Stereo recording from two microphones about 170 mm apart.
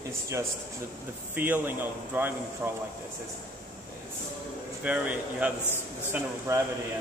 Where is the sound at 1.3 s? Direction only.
10° right (ahead or behind).